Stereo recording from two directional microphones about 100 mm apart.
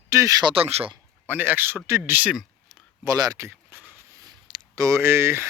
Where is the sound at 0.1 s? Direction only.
35° right (ahead or behind).